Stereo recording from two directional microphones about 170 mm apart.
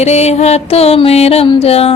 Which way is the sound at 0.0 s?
40° left (ahead or behind).